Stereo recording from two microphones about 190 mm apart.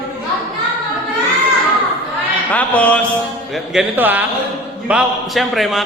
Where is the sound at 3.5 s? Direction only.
5° right (ahead or behind).